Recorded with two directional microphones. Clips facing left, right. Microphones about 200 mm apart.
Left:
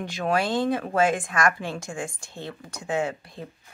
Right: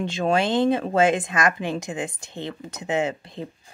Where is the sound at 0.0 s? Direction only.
25° right (ahead or behind).